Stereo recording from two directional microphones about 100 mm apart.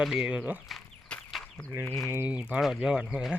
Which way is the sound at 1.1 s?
10° left (ahead or behind).